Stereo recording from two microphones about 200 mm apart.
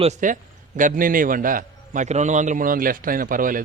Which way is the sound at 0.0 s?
35° right (ahead or behind).